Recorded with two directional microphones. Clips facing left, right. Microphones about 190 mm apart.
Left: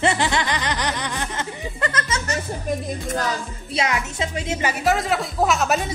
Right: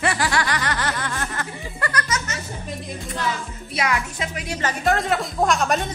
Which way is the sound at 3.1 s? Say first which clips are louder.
Left 2 dB; 40° left (ahead or behind).